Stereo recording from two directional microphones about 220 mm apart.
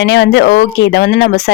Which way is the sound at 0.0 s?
50° left (ahead or behind).